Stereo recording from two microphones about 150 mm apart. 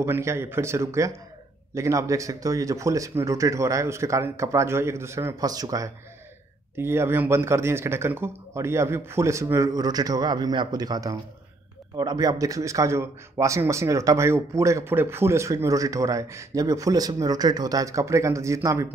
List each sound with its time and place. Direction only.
0.0 s speech: 20° right (ahead or behind)